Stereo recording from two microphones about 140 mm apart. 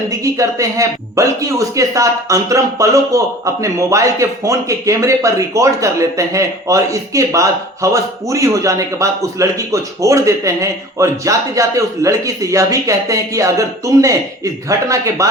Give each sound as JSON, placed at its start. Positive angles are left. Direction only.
{"t": 0.1, "sound": "speech", "side_deg": -25}